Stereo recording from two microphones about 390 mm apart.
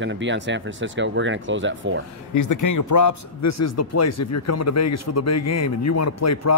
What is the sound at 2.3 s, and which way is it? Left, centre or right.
Speech, left.